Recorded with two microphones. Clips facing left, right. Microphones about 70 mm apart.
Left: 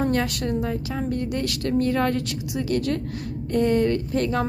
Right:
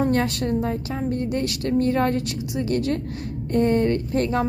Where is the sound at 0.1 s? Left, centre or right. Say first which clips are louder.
Right 2 dB; right.